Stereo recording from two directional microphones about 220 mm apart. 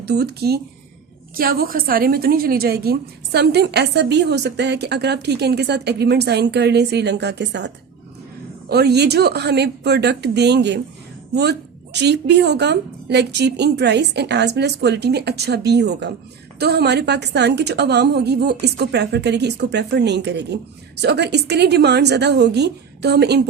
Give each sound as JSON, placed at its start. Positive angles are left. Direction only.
{"t": 0.0, "sound": "a woman's voice", "side_deg": -50}
{"t": 8.7, "sound": "a woman's voice", "side_deg": -50}
{"t": 11.9, "sound": "a woman's voice", "side_deg": -50}